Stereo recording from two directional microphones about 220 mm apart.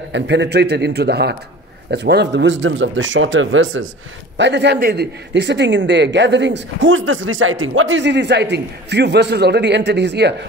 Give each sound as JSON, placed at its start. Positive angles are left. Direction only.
{"t": 0.1, "sound": "a man's voice", "side_deg": -50}